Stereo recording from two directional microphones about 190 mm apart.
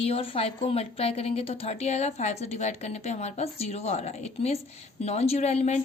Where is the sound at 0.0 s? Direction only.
30° left (ahead or behind).